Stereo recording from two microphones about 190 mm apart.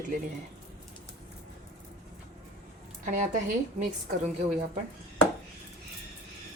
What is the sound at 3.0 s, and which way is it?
Speech, 45° right (ahead or behind).